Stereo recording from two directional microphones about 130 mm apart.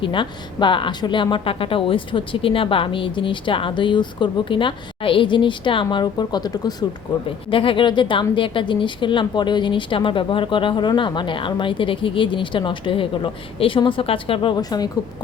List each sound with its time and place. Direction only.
0.0 s a woman's voice: 40° left (ahead or behind)
7.3 s a woman's voice: 40° left (ahead or behind)